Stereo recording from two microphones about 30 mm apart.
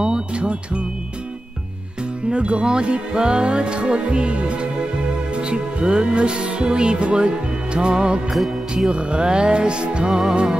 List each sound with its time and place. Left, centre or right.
0.0 s music: right
2.2 s music: right
8.3 s music: centre
8.8 s music: right